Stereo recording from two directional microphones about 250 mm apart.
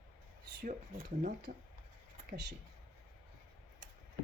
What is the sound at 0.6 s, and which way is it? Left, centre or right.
Speech, right.